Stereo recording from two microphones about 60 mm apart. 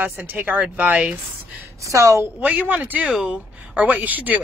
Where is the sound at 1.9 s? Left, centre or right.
Right.